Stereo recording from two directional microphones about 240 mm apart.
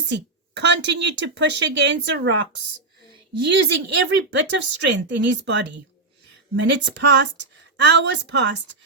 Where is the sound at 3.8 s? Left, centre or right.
Right.